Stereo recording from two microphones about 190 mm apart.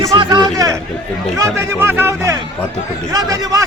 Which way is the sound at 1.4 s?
15° right (ahead or behind).